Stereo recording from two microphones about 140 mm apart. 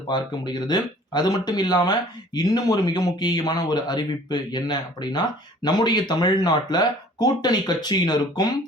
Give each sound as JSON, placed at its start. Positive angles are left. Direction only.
{"t": 0.1, "sound": "speech", "side_deg": 30}